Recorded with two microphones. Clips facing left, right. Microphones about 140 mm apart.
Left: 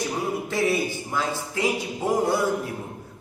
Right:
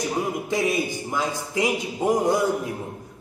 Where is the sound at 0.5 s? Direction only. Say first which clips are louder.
Left 1 dB; 15° right (ahead or behind).